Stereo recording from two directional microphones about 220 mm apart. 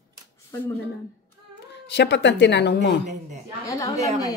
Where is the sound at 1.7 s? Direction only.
50° left (ahead or behind).